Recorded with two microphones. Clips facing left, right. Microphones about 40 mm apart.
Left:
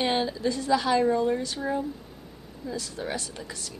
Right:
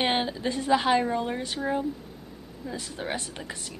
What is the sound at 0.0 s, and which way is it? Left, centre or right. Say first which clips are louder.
A woman's voice: left 1 dB; right.